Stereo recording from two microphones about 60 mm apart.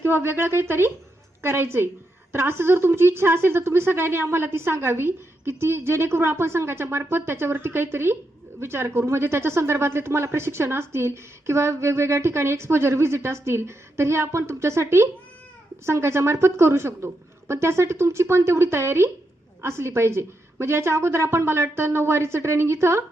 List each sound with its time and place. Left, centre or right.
0.0 s speech: right